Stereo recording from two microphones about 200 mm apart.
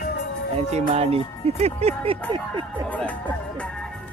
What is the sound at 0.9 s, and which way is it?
Music, 30° right (ahead or behind).